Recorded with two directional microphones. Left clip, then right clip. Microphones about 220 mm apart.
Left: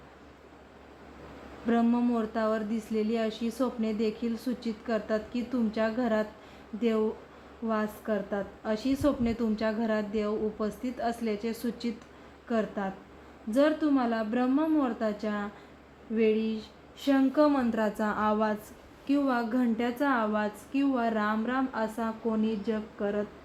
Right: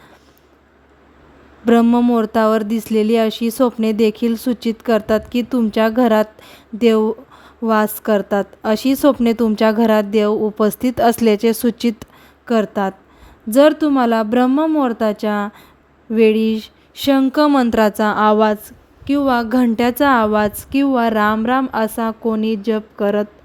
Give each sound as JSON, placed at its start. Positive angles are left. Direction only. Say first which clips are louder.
{"t": 1.6, "sound": "a woman's voice", "louder": "right 14 dB", "side_deg": -50}